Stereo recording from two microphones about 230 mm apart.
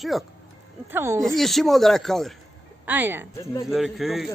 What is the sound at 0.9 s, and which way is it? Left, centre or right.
Speech, centre.